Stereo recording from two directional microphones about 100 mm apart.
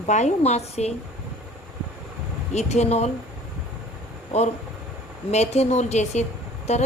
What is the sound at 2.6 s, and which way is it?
Speech, 90° left.